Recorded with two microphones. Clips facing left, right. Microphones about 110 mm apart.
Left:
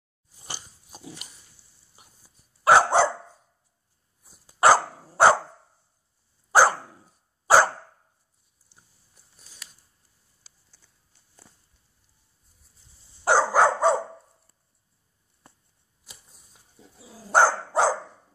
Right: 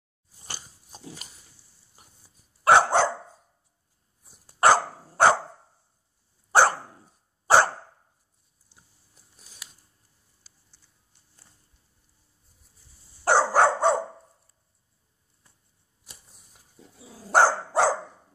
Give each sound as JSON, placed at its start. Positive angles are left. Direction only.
{"t": 2.0, "sound": "dog", "side_deg": 5}
{"t": 4.2, "sound": "dog", "side_deg": 0}
{"t": 7.4, "sound": "dog", "side_deg": 5}
{"t": 13.2, "sound": "dog", "side_deg": 0}
{"t": 15.4, "sound": "a sound", "side_deg": 65}
{"t": 16.8, "sound": "dog", "side_deg": 0}